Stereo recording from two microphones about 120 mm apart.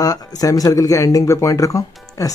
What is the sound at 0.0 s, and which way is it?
Speech, 30° left (ahead or behind).